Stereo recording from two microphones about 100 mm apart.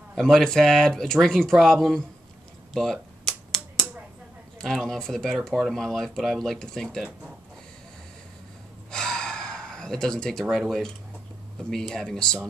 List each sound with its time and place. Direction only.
0.1 s speech: 5° left (ahead or behind)
2.7 s a sound: 5° left (ahead or behind)
4.6 s speech: 5° left (ahead or behind)
8.9 s gasp: 5° left (ahead or behind)
10.5 s speech: centre (ahead or behind)